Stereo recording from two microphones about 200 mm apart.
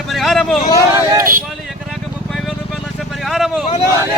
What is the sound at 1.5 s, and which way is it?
Vehicle, centre (ahead or behind).